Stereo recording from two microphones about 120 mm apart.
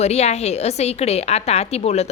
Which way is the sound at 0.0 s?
65° left (ahead or behind).